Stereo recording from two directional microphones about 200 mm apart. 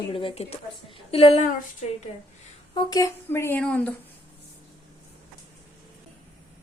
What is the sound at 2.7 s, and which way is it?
A woman's voice, 20° left (ahead or behind).